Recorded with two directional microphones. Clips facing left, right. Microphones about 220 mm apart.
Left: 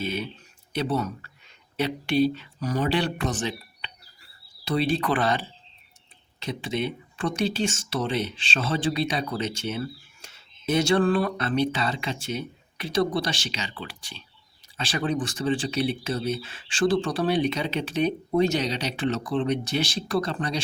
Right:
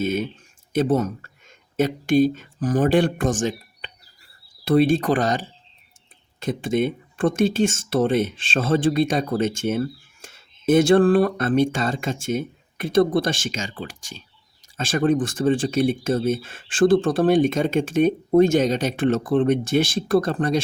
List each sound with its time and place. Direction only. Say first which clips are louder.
0.0 s speech: right 7 dB; 45° right (ahead or behind)